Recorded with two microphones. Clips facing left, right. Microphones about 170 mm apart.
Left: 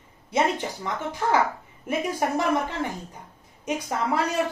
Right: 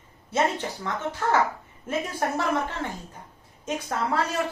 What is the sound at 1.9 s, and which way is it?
A woman's voice, 15° left (ahead or behind).